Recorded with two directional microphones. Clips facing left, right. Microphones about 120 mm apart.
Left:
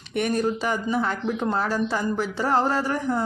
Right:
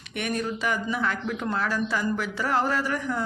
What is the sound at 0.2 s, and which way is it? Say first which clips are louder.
Speech: left 5 dB; 35° left (ahead or behind).